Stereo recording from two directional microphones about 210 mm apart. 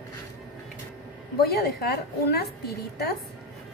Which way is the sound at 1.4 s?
50° left (ahead or behind).